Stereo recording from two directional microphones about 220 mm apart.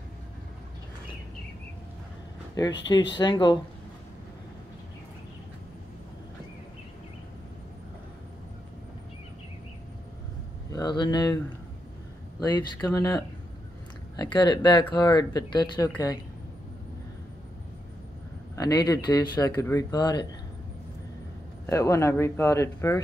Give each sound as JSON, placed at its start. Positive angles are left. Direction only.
{"t": 3.2, "sound": "speech", "side_deg": 20}
{"t": 10.7, "sound": "speech", "side_deg": 20}
{"t": 18.6, "sound": "speech", "side_deg": 15}
{"t": 21.6, "sound": "speech", "side_deg": 15}